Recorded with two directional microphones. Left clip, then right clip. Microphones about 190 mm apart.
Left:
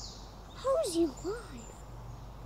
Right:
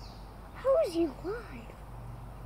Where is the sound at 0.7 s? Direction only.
10° left (ahead or behind).